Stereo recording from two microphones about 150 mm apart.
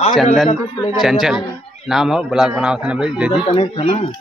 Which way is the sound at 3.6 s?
45° left (ahead or behind).